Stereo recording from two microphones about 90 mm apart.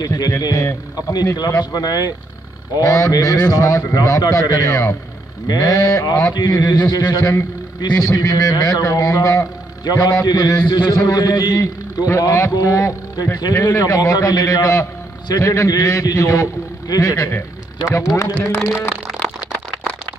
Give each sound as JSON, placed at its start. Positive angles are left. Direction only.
{"t": 0.0, "sound": "a man's voice", "side_deg": 50}
{"t": 17.3, "sound": "a man's voice", "side_deg": 25}
{"t": 18.0, "sound": "a man's voice", "side_deg": 35}